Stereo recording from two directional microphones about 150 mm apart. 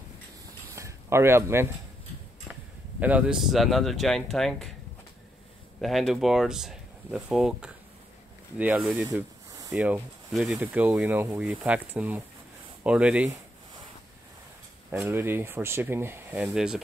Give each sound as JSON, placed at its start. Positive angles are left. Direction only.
{"t": 0.7, "sound": "a sound", "side_deg": -20}
{"t": 3.0, "sound": "speech", "side_deg": -10}
{"t": 5.8, "sound": "speech", "side_deg": 0}
{"t": 14.9, "sound": "speech", "side_deg": -15}